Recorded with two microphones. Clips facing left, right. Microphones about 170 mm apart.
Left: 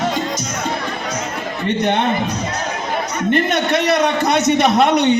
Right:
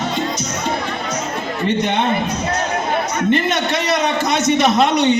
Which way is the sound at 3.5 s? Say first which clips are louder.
Left 3 dB; 60° left (ahead or behind).